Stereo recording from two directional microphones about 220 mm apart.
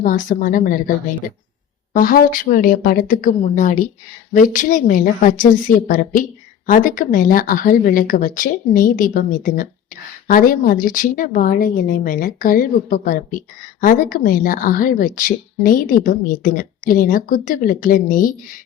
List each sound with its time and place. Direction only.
0.0 s speech: 35° left (ahead or behind)